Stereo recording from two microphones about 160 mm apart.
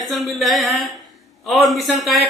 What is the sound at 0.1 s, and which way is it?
A woman's voice, centre (ahead or behind).